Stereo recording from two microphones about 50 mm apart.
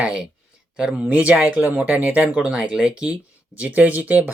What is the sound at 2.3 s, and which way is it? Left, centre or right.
Speech, centre.